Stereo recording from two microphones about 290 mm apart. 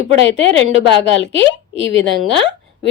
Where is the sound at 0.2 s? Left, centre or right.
Left.